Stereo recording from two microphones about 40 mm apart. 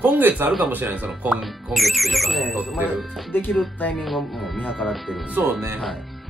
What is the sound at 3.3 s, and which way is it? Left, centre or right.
Speech, left.